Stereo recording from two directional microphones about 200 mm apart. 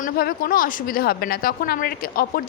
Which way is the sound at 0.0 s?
45° left (ahead or behind).